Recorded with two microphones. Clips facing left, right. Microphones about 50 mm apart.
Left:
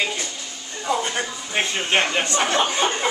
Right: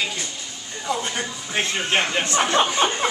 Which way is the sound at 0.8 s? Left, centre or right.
Centre.